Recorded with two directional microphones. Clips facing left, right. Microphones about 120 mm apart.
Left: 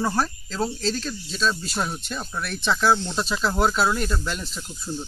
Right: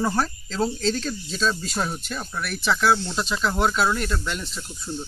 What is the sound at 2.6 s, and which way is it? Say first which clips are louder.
Speech: even; centre (ahead or behind).